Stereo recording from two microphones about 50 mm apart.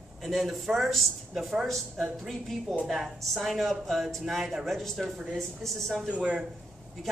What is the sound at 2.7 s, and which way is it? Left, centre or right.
A woman's voice, centre.